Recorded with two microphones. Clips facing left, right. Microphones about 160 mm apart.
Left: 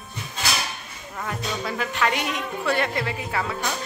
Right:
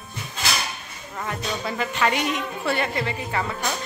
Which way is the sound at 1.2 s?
Centre (ahead or behind).